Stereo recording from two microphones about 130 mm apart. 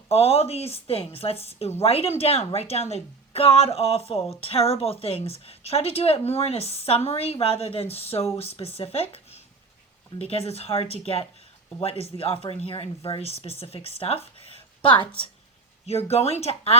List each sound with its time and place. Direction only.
0.1 s a woman's voice: 50° left (ahead or behind)
15.9 s speech: 50° left (ahead or behind)